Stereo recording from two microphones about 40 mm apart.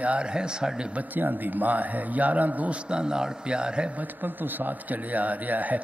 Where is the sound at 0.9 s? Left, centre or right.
Right.